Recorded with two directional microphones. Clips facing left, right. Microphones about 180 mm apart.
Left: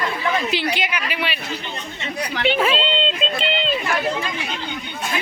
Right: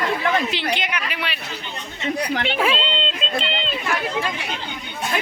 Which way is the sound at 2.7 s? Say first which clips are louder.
Left 2 dB; 5° left (ahead or behind).